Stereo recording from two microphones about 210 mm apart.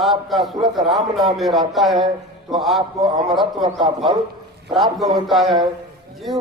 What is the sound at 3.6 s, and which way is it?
Speech, 20° right (ahead or behind).